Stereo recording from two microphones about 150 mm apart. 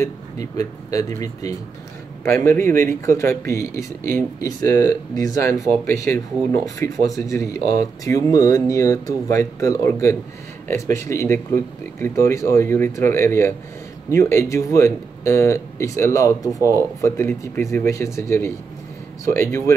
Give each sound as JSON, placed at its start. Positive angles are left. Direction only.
{"t": 0.0, "sound": "speech", "side_deg": 25}